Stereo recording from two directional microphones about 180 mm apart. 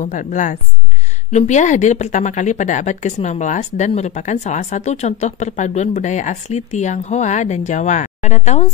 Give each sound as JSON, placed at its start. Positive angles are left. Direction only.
{"t": 0.0, "sound": "a woman's voice", "side_deg": 45}